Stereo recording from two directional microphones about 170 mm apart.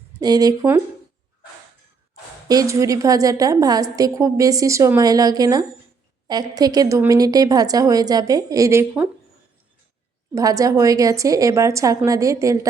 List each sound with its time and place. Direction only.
0.2 s a woman's voice: 20° right (ahead or behind)
2.5 s a woman's voice: 20° right (ahead or behind)
10.3 s a woman's voice: 20° right (ahead or behind)